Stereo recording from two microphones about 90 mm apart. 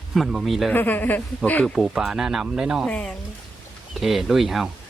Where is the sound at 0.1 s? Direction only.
5° right (ahead or behind).